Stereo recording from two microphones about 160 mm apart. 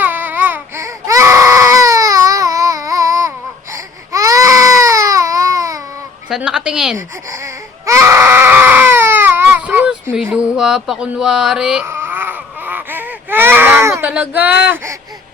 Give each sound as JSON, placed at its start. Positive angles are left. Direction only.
{"t": 0.0, "sound": "baby cry", "side_deg": -10}
{"t": 6.2, "sound": "a woman's voice", "side_deg": -5}
{"t": 7.3, "sound": "baby cry", "side_deg": -20}
{"t": 14.1, "sound": "child singing", "side_deg": -10}